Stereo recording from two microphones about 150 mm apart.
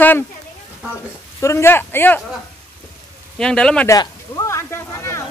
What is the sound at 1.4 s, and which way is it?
Speech, 20° left (ahead or behind).